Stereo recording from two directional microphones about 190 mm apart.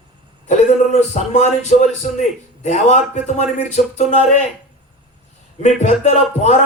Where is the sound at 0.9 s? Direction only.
35° left (ahead or behind).